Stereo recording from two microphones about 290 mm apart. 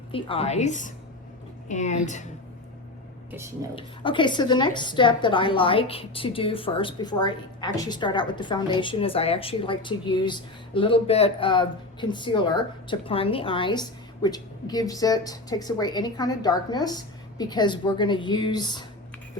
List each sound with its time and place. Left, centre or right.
0.1 s a woman's voice: centre
3.8 s a woman's voice: centre